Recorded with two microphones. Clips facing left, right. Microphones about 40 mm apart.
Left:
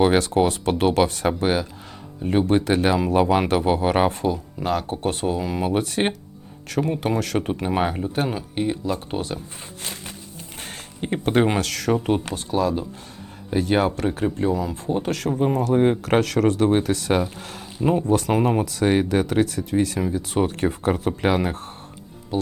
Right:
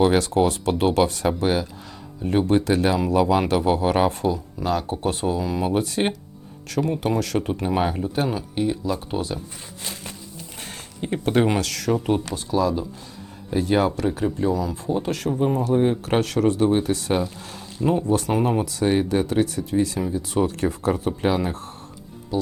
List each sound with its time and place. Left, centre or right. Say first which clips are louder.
0.0 s speech: even; left
10.6 s speech: left 1 dB; left
13.7 s speech: right 1 dB; left
15.3 s speech: even; centre
15.6 s speech: left 1 dB; left
17.2 s speech: left 1 dB; left
21.2 s speech: left 1 dB; left